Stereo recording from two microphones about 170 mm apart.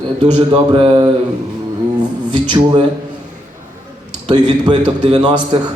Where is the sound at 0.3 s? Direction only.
30° right (ahead or behind).